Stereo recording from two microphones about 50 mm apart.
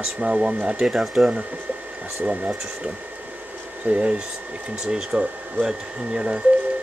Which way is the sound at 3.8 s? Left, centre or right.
Right.